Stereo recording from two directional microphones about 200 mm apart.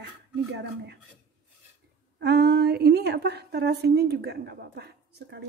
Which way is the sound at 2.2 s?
55° right (ahead or behind).